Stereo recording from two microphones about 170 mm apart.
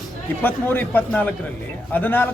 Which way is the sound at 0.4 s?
10° left (ahead or behind).